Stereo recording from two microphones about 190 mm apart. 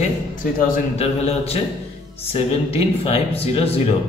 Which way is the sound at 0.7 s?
35° left (ahead or behind).